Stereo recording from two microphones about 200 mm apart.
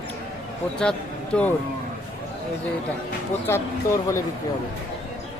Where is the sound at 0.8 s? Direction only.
5° left (ahead or behind).